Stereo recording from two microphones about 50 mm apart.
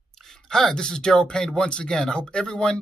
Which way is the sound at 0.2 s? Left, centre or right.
Centre.